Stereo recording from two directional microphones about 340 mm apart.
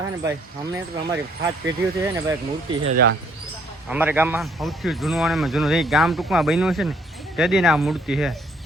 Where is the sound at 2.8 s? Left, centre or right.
Right.